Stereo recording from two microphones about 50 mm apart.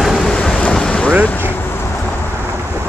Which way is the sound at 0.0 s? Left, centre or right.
Centre.